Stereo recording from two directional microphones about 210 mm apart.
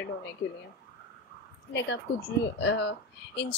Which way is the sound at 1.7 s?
55° left (ahead or behind).